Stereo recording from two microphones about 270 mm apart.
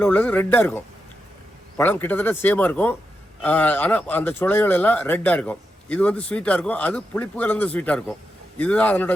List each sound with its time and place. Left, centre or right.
0.0 s speech: centre
1.8 s speech: centre